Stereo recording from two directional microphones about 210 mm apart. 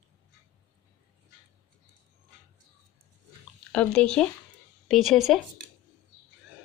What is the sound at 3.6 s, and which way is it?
Drip, 5° left (ahead or behind).